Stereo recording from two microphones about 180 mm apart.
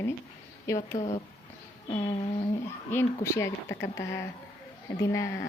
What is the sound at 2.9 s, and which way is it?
Speech, 15° left (ahead or behind).